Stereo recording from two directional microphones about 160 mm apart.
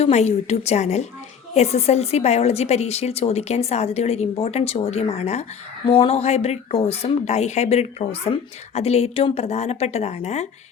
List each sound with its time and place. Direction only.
0.0 s a woman's voice: 40° left (ahead or behind)